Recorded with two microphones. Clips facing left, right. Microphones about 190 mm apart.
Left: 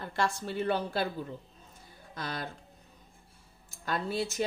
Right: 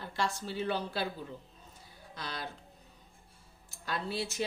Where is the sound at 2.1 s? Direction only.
50° left (ahead or behind).